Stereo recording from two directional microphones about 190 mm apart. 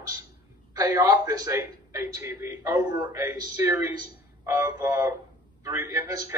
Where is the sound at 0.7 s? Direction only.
20° right (ahead or behind).